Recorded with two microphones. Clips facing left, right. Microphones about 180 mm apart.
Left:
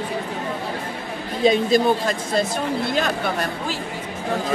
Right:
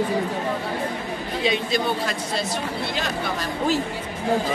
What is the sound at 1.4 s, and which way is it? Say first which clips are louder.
Speech: left 7 dB; 45° left (ahead or behind).